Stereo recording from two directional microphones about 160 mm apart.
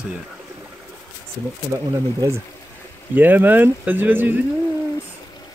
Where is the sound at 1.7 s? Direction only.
15° right (ahead or behind).